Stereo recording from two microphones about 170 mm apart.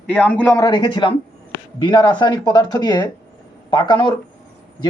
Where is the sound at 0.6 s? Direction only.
25° left (ahead or behind).